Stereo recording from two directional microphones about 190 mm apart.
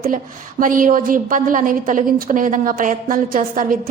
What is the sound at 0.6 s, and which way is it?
A woman's voice, 45° right (ahead or behind).